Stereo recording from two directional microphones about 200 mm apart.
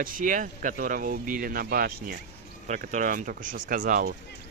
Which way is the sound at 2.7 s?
40° right (ahead or behind).